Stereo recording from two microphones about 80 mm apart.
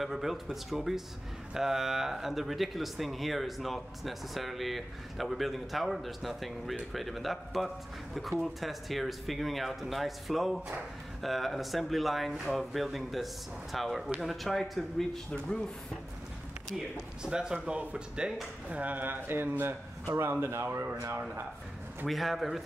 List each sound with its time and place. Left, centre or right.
0.0 s speech: centre
17.2 s speech: centre; by 20.8 s right
22.0 s speech: centre